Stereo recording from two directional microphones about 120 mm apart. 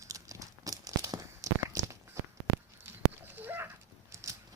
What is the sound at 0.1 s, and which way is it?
Tearing, 30° right (ahead or behind).